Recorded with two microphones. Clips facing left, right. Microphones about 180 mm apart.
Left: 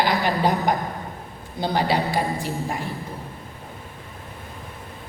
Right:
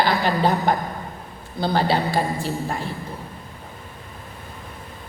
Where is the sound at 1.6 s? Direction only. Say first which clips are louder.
Right 1 dB; 15° left (ahead or behind).